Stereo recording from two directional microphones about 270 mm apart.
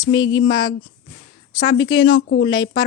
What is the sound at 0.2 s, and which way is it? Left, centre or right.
Speech, centre.